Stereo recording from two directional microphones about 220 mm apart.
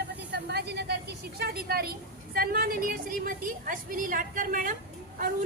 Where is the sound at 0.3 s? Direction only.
50° right (ahead or behind).